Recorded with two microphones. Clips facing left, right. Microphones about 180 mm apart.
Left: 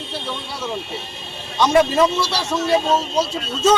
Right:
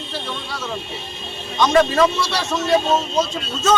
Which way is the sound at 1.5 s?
10° left (ahead or behind).